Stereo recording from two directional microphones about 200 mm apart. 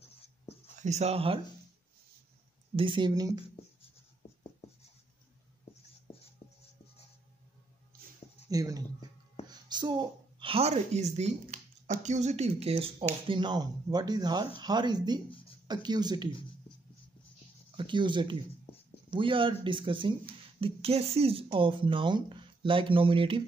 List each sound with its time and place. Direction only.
0.7 s speech: 35° right (ahead or behind)
2.7 s speech: 25° right (ahead or behind)
6.1 s writing: 30° left (ahead or behind)
8.5 s speech: 15° right (ahead or behind)
17.7 s speech: 25° right (ahead or behind)